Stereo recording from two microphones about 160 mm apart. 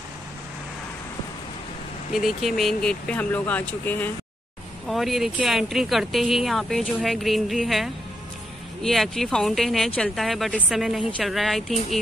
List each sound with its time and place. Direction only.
2.1 s speech: centre (ahead or behind)
4.8 s speech: centre (ahead or behind)